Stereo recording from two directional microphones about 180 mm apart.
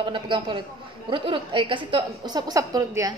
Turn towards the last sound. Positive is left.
turn(degrees=-20)  # may be behind; listen again after turning